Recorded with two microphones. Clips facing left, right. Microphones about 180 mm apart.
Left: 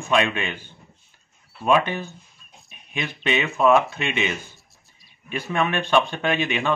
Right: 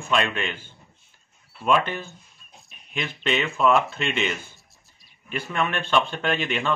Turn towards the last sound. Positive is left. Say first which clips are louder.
# left 2 dB
turn(degrees=15)  # may be behind; listen again after turning